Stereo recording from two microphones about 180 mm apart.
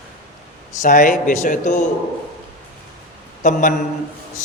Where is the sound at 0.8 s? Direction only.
45° left (ahead or behind).